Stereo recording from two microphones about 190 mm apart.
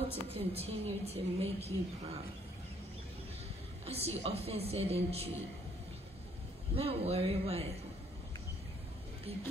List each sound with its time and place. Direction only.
0.3 s a woman's voice: 30° right (ahead or behind)
3.8 s a woman's voice: 30° right (ahead or behind)
6.7 s a woman's voice: 30° right (ahead or behind)
9.3 s a woman's voice: 30° right (ahead or behind)